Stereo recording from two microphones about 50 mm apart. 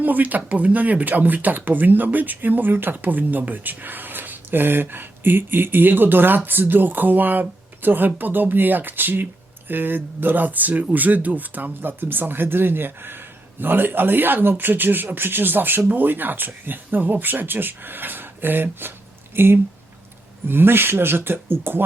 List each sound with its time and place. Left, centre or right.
0.0 s speech: right